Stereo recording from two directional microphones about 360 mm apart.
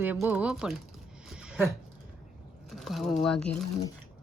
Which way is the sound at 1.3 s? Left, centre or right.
Centre.